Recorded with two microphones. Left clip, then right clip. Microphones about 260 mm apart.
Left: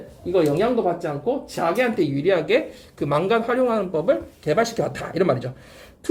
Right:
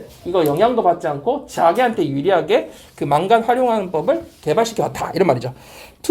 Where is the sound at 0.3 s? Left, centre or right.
Centre.